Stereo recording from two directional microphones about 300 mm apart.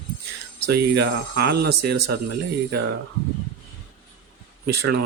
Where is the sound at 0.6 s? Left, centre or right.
Right.